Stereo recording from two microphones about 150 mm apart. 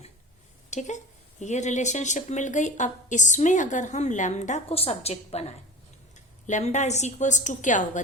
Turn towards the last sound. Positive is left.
turn(degrees=55)  # may be behind; listen again after turning